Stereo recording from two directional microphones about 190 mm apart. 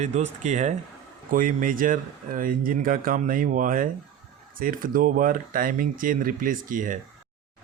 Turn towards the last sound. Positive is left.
turn(degrees=-45)  # may be behind; listen again after turning